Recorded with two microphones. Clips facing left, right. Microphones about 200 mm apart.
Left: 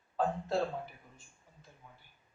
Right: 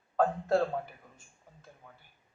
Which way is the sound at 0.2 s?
55° right (ahead or behind).